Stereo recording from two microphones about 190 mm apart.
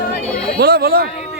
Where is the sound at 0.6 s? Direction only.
55° right (ahead or behind).